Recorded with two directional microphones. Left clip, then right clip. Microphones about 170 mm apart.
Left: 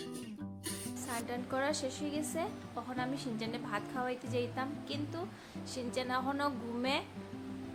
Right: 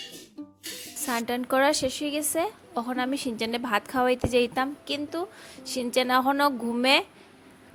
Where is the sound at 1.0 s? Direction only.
65° right (ahead or behind).